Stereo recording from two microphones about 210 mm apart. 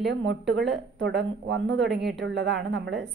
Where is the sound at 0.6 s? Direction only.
60° right (ahead or behind).